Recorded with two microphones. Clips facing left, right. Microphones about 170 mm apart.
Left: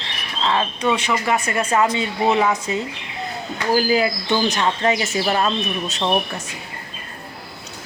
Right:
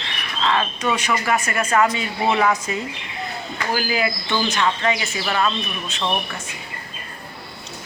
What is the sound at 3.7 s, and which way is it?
Speech, 35° left (ahead or behind).